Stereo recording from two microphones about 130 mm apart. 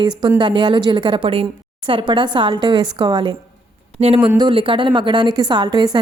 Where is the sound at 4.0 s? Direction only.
50° right (ahead or behind).